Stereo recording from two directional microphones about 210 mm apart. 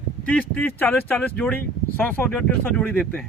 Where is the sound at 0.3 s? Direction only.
5° left (ahead or behind).